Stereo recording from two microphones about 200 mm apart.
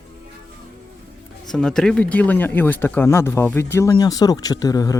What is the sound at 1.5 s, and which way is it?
Speech, 5° left (ahead or behind).